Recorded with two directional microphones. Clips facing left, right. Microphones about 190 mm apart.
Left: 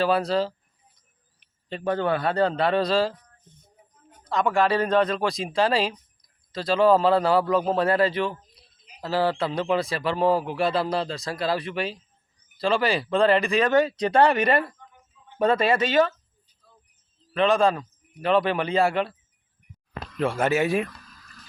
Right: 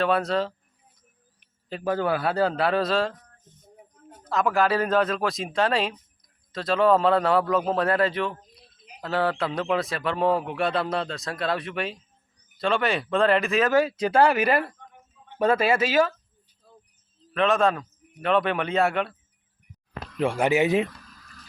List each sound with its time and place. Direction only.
0.0 s a man's voice: centre (ahead or behind)
1.7 s a man's voice: 5° right (ahead or behind)
3.5 s a sound: 40° right (ahead or behind)
4.2 s a man's voice: 5° right (ahead or behind)
16.6 s a sound: 45° right (ahead or behind)
17.3 s a man's voice: centre (ahead or behind)
20.1 s speech: 15° right (ahead or behind)